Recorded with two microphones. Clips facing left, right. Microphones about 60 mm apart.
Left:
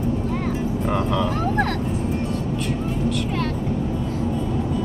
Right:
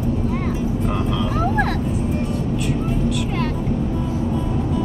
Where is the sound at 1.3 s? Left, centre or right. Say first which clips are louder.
Right 2 dB; centre.